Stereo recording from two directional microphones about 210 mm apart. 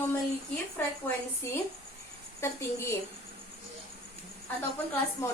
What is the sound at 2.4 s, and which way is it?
Speech, 10° left (ahead or behind).